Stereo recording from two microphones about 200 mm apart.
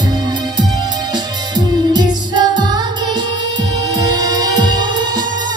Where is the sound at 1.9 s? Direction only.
20° right (ahead or behind).